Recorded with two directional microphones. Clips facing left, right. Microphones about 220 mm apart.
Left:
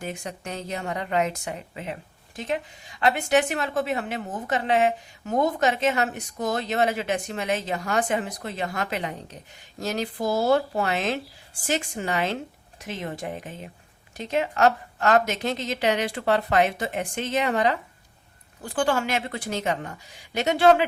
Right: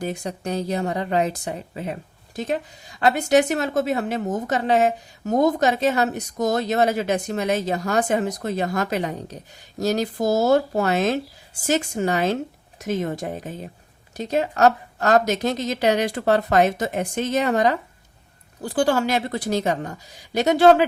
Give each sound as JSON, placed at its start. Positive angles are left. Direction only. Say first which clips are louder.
{"t": 0.0, "sound": "speech", "louder": "right 6 dB", "side_deg": -35}